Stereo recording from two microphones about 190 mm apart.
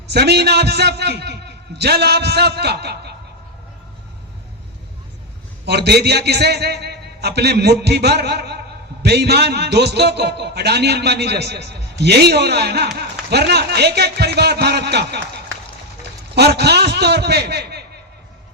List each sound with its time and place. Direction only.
0.1 s a man's voice: 60° right (ahead or behind)
5.6 s a man's voice: 60° right (ahead or behind)
16.3 s a man's voice: 60° right (ahead or behind)